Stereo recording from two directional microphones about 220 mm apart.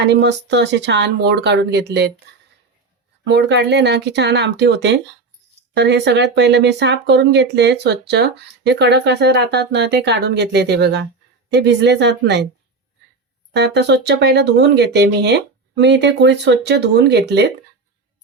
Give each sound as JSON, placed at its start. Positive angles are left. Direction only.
{"t": 0.1, "sound": "speech", "side_deg": -50}
{"t": 3.2, "sound": "speech", "side_deg": -50}
{"t": 13.5, "sound": "speech", "side_deg": -50}